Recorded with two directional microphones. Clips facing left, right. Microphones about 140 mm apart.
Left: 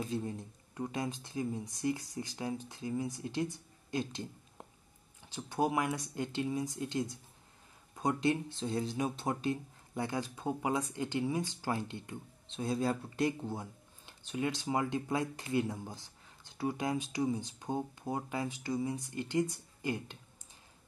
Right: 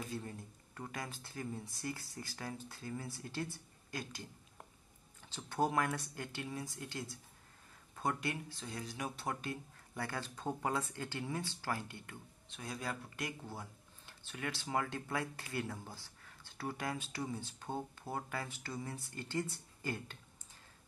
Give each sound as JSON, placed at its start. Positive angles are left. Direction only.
{"t": 0.0, "sound": "speech", "side_deg": 20}
{"t": 5.2, "sound": "speech", "side_deg": 15}